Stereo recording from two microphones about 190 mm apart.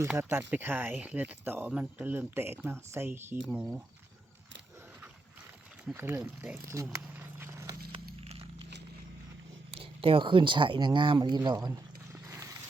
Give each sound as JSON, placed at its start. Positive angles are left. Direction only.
{"t": 0.1, "sound": "speech", "side_deg": -10}
{"t": 5.9, "sound": "speech", "side_deg": -10}
{"t": 8.2, "sound": "a sound", "side_deg": -30}
{"t": 9.7, "sound": "speech", "side_deg": -30}